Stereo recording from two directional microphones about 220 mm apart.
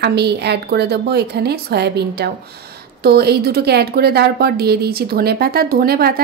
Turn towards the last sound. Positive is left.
turn(degrees=-45)  # may be behind; listen again after turning